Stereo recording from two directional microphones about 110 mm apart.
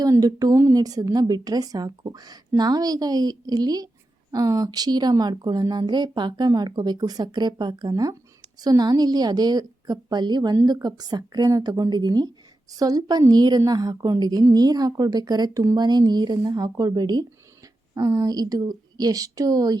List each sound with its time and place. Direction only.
0.0 s speech: 35° right (ahead or behind)